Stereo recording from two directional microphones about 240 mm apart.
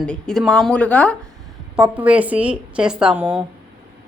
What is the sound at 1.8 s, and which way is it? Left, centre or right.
Speech, centre.